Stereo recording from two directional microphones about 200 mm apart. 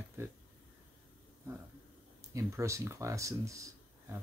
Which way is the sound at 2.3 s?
15° right (ahead or behind).